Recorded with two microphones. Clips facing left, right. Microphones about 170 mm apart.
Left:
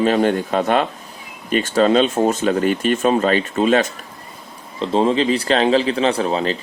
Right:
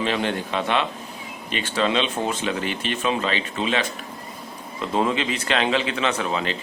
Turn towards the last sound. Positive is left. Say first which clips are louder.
# left 6 dB
turn(degrees=35)  # may be behind; listen again after turning